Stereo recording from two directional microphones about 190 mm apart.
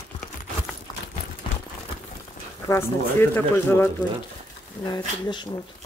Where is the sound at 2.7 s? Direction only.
15° left (ahead or behind).